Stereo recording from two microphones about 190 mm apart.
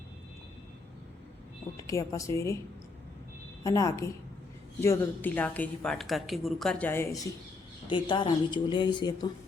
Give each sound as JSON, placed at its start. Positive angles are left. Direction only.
{"t": 1.7, "sound": "speech", "side_deg": 15}
{"t": 3.6, "sound": "speech", "side_deg": 15}
{"t": 7.9, "sound": "speech", "side_deg": 25}